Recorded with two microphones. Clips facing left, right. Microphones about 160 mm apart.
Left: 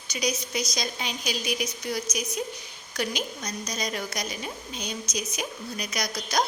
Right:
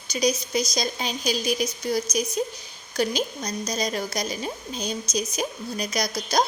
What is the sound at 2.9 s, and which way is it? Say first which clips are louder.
A woman's voice: right 5 dB; 35° right (ahead or behind).